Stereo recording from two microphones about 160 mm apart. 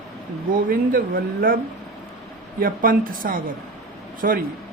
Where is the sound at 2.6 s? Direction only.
60° right (ahead or behind).